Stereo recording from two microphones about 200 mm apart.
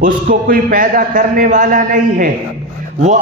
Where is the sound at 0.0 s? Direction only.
45° right (ahead or behind).